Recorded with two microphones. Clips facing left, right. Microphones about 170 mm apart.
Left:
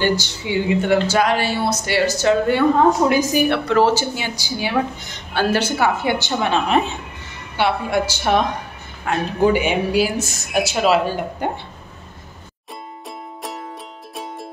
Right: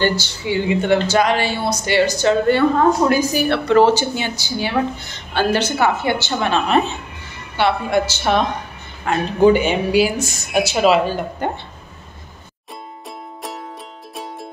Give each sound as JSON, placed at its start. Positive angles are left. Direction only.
{"t": 0.0, "sound": "speech", "side_deg": 15}
{"t": 0.7, "sound": "speech", "side_deg": 5}
{"t": 3.6, "sound": "speech", "side_deg": 5}
{"t": 14.1, "sound": "music", "side_deg": 0}